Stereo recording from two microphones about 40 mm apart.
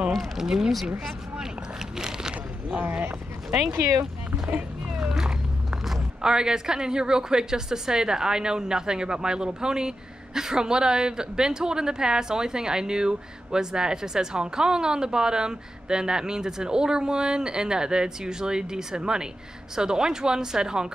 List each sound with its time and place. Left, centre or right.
0.4 s speech: centre
2.0 s a sound: centre
2.8 s speech: right
4.9 s speech: centre